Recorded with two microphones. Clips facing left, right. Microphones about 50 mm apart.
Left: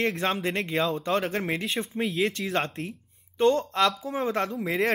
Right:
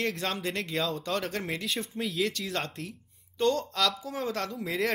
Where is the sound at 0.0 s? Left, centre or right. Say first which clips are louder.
Left 5 dB; left.